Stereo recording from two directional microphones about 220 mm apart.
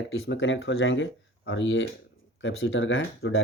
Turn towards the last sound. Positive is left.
turn(degrees=60)  # may be behind; listen again after turning